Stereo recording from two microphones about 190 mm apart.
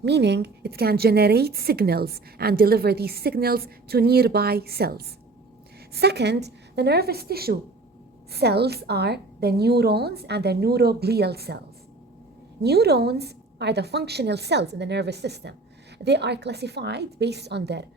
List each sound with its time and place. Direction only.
0.0 s a woman's voice: 60° right (ahead or behind)
12.6 s a woman's voice: 60° right (ahead or behind)